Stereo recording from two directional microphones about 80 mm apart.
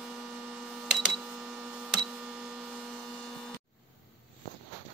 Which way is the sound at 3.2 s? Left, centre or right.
Centre.